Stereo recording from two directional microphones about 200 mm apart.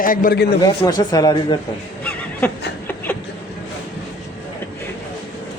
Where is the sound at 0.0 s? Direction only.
45° left (ahead or behind).